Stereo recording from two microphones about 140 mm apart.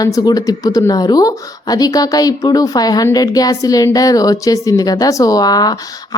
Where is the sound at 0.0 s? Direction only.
25° left (ahead or behind).